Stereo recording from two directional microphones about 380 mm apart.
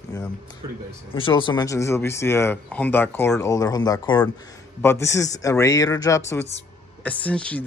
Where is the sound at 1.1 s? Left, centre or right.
Centre.